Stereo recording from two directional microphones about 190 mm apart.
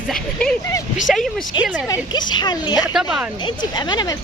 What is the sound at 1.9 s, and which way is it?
A woman's voice, 25° left (ahead or behind).